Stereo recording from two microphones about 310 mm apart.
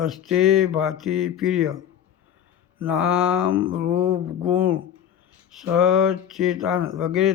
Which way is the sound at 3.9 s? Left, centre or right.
Right.